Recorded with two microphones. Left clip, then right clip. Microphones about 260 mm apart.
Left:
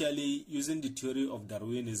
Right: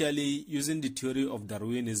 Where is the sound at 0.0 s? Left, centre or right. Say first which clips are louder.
Right 3 dB; right.